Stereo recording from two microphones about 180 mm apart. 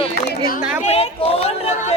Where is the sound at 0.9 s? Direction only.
35° left (ahead or behind).